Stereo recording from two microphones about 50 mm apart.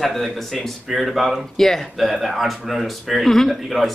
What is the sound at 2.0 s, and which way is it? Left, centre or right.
A man's voice, centre.